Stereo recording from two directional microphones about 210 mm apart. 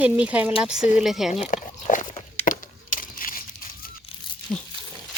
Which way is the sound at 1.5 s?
35° left (ahead or behind).